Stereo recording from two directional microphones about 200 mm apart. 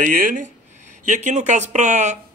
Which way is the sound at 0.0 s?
40° right (ahead or behind).